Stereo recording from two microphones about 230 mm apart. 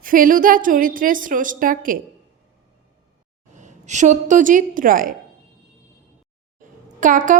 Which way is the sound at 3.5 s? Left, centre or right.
Right.